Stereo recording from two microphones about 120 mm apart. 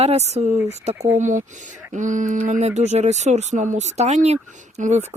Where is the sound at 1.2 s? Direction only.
90° right.